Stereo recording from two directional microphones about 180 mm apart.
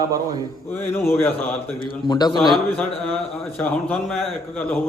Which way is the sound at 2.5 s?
10° left (ahead or behind).